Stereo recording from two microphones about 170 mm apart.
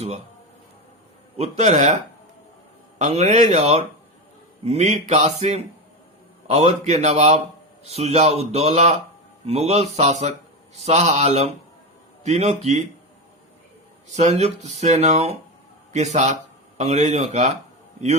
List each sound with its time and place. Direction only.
1.4 s speech: 40° right (ahead or behind)
3.0 s speech: 40° right (ahead or behind)
14.1 s speech: 40° right (ahead or behind)